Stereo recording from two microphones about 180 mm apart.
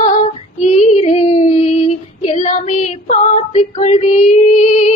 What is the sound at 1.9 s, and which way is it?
Female singing, 40° left (ahead or behind).